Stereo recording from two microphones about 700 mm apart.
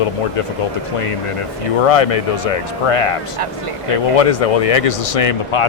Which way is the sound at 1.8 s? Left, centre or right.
Left.